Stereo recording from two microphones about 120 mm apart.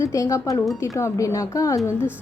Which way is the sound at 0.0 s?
25° left (ahead or behind).